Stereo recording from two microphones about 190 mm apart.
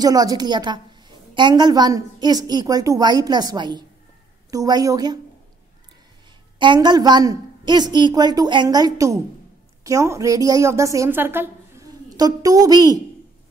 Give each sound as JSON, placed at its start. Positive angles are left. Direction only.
{"t": 0.0, "sound": "a woman's voice", "side_deg": -20}
{"t": 6.6, "sound": "a woman's voice", "side_deg": -25}